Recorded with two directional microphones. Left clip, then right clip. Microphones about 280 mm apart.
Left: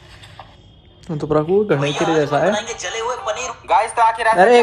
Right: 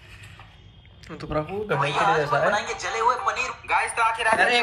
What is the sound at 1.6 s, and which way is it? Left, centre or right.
Speech, left.